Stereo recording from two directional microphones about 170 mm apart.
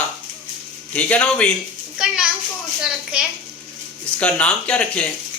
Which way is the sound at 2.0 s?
5° right (ahead or behind).